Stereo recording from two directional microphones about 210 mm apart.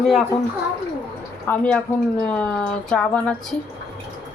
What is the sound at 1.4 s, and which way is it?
A woman's voice, 5° left (ahead or behind).